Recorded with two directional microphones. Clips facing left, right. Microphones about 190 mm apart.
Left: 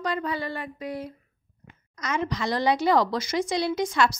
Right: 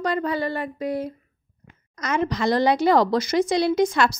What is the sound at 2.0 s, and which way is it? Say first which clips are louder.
A woman's voice: right 5 dB; 60° right (ahead or behind).